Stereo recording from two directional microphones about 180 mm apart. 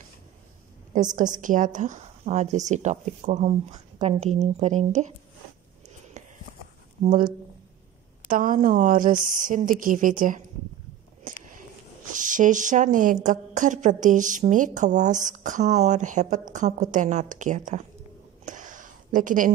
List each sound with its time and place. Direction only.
0.9 s a woman's voice: 45° right (ahead or behind)
6.2 s walk: 45° right (ahead or behind)
7.1 s a woman's voice: 50° right (ahead or behind)
12.0 s a woman's voice: 45° right (ahead or behind)
18.4 s a sound: 45° right (ahead or behind)